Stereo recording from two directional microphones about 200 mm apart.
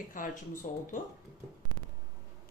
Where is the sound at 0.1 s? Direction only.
40° left (ahead or behind).